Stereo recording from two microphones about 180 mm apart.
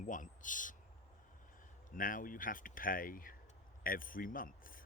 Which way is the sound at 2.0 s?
50° left (ahead or behind).